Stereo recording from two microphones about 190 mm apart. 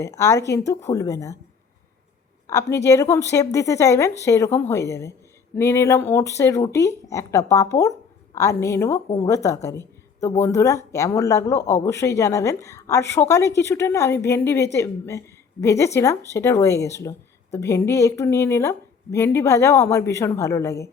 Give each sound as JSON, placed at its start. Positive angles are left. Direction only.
{"t": 0.0, "sound": "a woman's voice", "side_deg": 15}
{"t": 2.5, "sound": "a woman's voice", "side_deg": 15}